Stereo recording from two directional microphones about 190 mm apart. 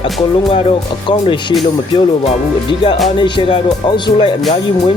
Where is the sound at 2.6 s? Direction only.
25° left (ahead or behind).